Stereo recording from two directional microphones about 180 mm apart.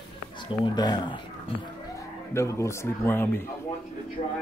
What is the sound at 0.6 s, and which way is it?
Speech, 25° left (ahead or behind).